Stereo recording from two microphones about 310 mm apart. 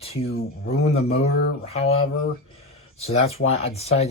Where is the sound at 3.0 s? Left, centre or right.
Centre.